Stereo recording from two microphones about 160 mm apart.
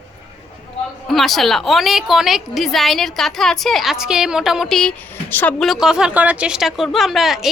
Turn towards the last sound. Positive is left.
turn(degrees=0)  # may be behind; listen again after turning